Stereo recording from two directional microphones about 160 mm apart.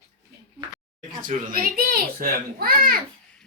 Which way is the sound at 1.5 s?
60° right (ahead or behind).